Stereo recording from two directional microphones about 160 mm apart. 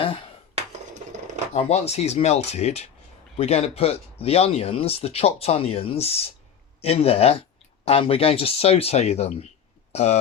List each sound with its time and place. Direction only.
0.0 s dishes: 30° left (ahead or behind)
1.5 s speech: 40° left (ahead or behind)